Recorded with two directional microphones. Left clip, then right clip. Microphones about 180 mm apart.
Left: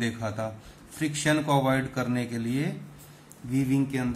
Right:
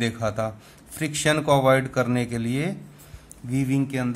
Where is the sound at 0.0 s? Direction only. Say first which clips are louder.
Right 5 dB; 65° right (ahead or behind).